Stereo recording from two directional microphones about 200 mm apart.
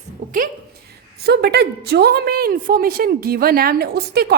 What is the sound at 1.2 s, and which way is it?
A woman's voice, 55° right (ahead or behind).